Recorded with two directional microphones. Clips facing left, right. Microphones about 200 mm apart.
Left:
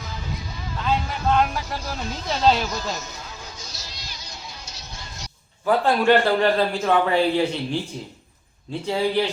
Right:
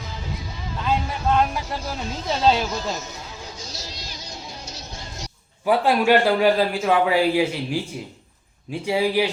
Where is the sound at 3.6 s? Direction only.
40° right (ahead or behind).